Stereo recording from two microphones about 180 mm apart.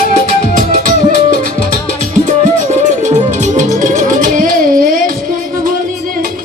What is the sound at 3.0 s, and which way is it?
Music, 40° right (ahead or behind).